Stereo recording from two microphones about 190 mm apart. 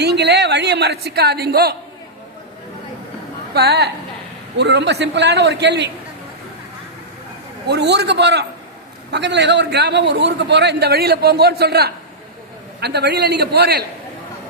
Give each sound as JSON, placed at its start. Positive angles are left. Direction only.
{"t": 0.0, "sound": "a man's voice", "side_deg": -60}
{"t": 3.5, "sound": "a man's voice", "side_deg": -55}
{"t": 7.7, "sound": "a man's voice", "side_deg": -65}